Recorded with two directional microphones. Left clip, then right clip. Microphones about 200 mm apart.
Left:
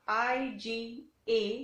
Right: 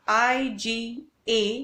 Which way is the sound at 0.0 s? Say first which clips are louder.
Right 8 dB; 40° right (ahead or behind).